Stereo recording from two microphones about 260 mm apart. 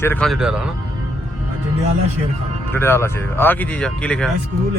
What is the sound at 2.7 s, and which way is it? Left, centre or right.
Speech, centre.